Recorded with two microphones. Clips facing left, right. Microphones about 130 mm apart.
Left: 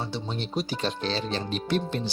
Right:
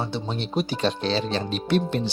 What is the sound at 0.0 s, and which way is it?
Speech, 65° right (ahead or behind).